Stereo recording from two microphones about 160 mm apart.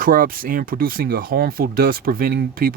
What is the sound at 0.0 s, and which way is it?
Speech, 60° right (ahead or behind).